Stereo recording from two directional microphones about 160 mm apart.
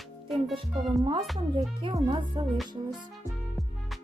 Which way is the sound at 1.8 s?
30° right (ahead or behind).